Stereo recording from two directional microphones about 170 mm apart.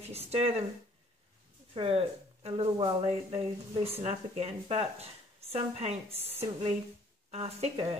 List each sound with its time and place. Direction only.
0.1 s speech: 35° right (ahead or behind)
1.7 s speech: 35° right (ahead or behind)